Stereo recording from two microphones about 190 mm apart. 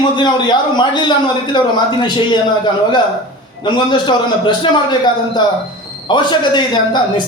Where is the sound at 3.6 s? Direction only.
25° left (ahead or behind).